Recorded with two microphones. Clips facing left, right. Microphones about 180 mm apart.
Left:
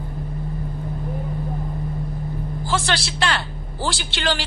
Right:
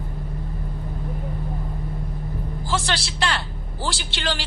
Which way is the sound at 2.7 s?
65° left (ahead or behind).